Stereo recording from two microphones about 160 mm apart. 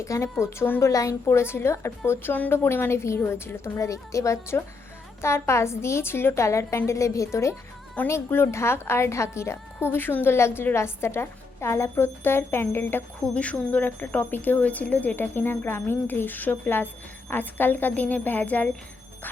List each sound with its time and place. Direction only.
0.0 s a woman's voice: 20° left (ahead or behind)